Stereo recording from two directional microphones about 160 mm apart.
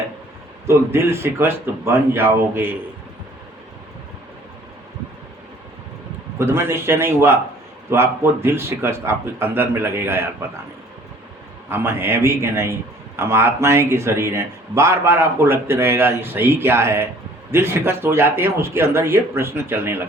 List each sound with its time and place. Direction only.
0.7 s speech: 15° right (ahead or behind)
6.4 s speech: 15° right (ahead or behind)
11.7 s speech: 15° right (ahead or behind)